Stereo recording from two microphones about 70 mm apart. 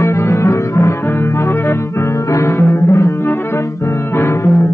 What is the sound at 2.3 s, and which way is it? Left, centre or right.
Music, left.